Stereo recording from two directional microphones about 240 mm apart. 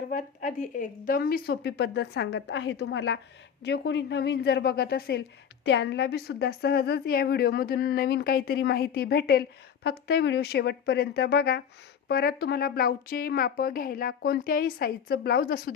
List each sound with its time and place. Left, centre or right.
0.1 s a woman's voice: left